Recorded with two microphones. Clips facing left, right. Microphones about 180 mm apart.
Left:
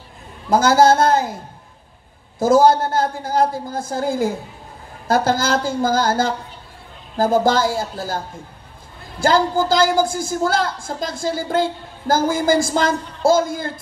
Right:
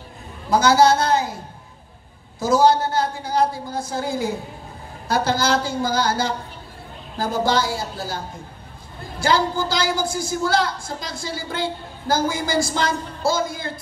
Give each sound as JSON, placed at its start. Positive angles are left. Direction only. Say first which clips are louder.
{"t": 0.5, "sound": "a woman's voice", "louder": "left 2 dB", "side_deg": 50}
{"t": 2.3, "sound": "a woman's voice", "louder": "left 3 dB", "side_deg": 50}
{"t": 9.2, "sound": "a woman's voice", "louder": "left 4 dB", "side_deg": 50}